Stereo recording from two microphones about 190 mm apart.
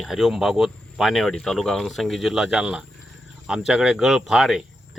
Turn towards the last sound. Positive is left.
turn(degrees=0)  # may be behind; listen again after turning